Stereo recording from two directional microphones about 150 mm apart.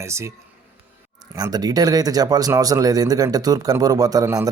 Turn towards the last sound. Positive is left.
turn(degrees=-25)  # may be behind; listen again after turning